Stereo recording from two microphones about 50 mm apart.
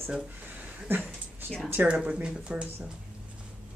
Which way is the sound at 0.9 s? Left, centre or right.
Right.